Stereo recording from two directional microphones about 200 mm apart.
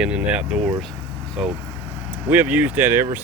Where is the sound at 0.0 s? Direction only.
5° right (ahead or behind).